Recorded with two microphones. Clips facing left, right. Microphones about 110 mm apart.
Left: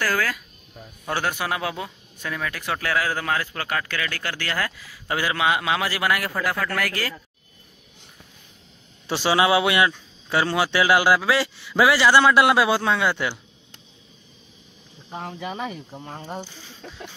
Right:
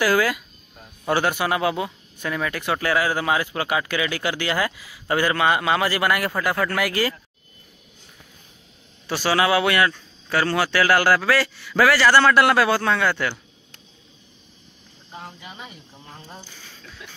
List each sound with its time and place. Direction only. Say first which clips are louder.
0.0 s a man's voice: right 5 dB; 5° right (ahead or behind)
5.1 s a man's voice: right 3 dB; 5° left (ahead or behind)
9.0 s speech: left 1 dB; 25° left (ahead or behind)
15.0 s speech: left 7 dB; 65° left (ahead or behind)
16.1 s speech: left 8 dB; 70° left (ahead or behind)